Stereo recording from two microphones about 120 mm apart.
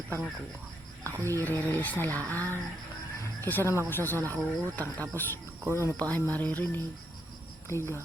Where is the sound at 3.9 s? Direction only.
15° left (ahead or behind).